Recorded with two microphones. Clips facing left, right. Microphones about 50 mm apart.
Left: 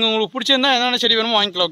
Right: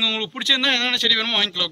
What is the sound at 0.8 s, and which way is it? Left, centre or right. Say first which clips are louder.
Speech: left 4 dB; centre.